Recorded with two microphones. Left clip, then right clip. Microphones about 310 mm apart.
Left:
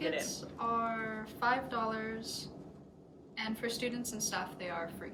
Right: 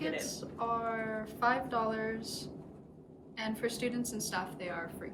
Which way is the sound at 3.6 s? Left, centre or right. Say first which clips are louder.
Right 3 dB; centre.